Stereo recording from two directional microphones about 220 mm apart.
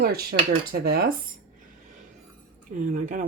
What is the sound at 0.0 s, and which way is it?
Speech, 45° right (ahead or behind).